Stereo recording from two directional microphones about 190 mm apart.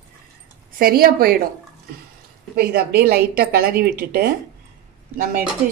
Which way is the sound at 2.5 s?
55° right (ahead or behind).